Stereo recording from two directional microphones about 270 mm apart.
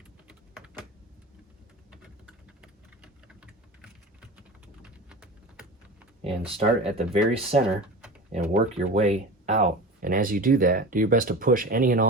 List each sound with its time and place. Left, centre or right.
0.3 s typing: centre
1.9 s typing: centre
4.8 s a sound: centre
6.2 s speech: right